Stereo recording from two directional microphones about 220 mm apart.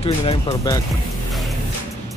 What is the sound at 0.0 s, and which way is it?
Speech, 25° left (ahead or behind).